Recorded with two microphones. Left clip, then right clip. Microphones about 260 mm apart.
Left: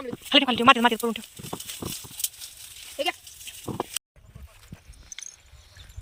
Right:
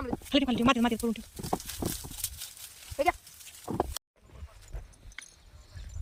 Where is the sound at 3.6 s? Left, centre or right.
Right.